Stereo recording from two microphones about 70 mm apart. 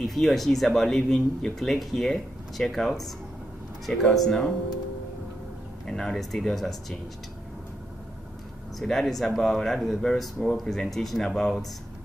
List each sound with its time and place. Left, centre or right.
0.0 s speech: centre
5.9 s speech: centre
8.7 s speech: centre